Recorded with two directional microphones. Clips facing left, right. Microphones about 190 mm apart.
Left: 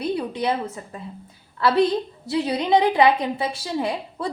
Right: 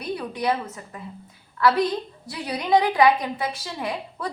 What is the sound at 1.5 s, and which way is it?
A woman's voice, 25° left (ahead or behind).